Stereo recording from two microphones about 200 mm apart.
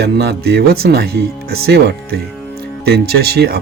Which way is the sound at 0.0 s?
55° right (ahead or behind).